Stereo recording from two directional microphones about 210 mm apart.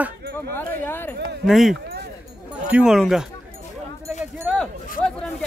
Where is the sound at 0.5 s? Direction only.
10° left (ahead or behind).